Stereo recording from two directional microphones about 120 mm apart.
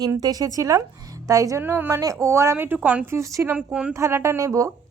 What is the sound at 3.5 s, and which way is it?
Speech, 10° right (ahead or behind).